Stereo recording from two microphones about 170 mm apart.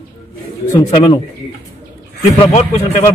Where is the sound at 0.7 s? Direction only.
35° left (ahead or behind).